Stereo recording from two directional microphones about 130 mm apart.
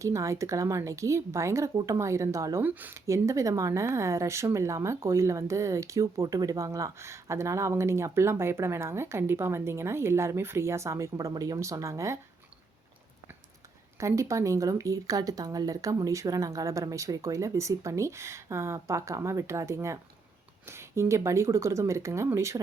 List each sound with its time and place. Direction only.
0.0 s speech: 25° right (ahead or behind)
2.6 s speech: 15° right (ahead or behind)
14.0 s speech: 25° right (ahead or behind)